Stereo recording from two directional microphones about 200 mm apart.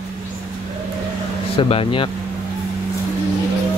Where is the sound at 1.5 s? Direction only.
30° left (ahead or behind).